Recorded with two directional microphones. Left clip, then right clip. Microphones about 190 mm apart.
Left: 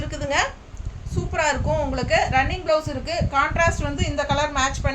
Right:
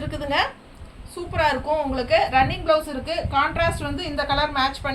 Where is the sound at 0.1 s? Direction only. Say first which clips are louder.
Even; 20° left (ahead or behind).